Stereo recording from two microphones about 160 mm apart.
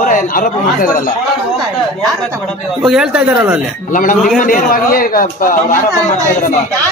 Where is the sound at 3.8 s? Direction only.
55° left (ahead or behind).